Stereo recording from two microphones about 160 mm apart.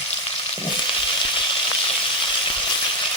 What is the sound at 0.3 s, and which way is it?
Frying, 35° left (ahead or behind).